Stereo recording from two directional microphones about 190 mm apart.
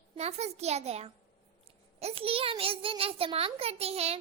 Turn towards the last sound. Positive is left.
turn(degrees=-35)  # may be behind; listen again after turning